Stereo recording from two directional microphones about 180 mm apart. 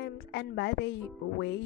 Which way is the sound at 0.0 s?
75° left (ahead or behind).